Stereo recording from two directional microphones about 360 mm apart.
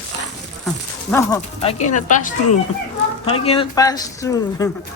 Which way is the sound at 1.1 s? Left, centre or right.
Centre.